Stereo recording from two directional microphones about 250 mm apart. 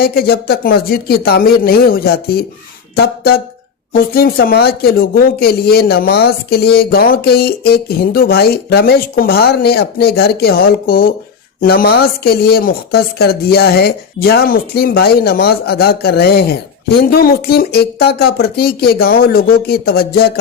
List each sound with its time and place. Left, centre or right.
0.0 s speech: left
3.9 s speech: left